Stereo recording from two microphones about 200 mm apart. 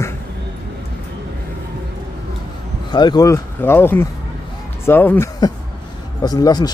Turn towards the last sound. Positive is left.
turn(degrees=20)  # may be behind; listen again after turning